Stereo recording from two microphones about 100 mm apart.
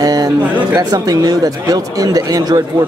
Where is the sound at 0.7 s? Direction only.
40° right (ahead or behind).